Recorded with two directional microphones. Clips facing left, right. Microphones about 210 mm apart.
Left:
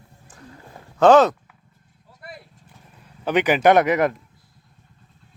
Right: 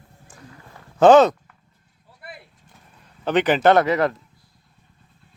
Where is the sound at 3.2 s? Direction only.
10° left (ahead or behind).